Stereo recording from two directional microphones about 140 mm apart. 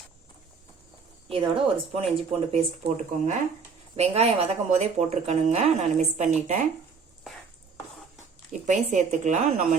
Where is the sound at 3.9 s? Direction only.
50° right (ahead or behind).